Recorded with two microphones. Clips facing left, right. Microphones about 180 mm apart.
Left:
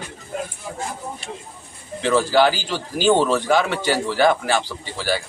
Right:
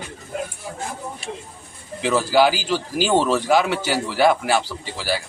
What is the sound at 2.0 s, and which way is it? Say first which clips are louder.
Speech: even; 5° right (ahead or behind).